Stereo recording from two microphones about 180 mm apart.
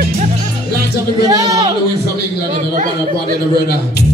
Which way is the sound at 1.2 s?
20° right (ahead or behind).